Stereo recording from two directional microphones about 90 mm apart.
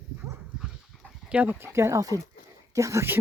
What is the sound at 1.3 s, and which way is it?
Speech, 20° right (ahead or behind).